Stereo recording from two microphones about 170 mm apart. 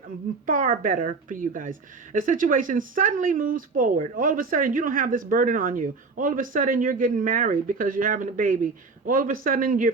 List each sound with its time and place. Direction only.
0.4 s speech: 55° right (ahead or behind)